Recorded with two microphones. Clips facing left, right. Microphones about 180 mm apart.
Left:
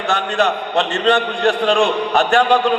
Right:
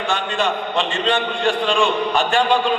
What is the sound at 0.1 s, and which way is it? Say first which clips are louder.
A man's voice: left 5 dB; 65° left (ahead or behind).